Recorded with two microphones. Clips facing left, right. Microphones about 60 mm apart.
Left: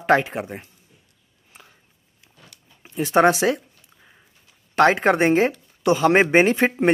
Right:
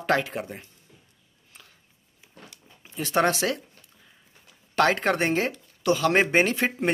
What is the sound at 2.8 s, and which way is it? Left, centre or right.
Speech, centre.